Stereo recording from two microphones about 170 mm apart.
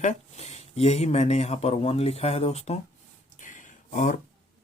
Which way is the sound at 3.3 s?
50° left (ahead or behind).